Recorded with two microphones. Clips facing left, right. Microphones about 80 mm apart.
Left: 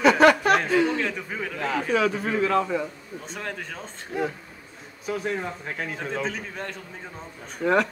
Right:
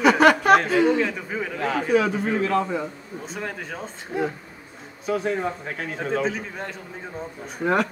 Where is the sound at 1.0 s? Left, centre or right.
Centre.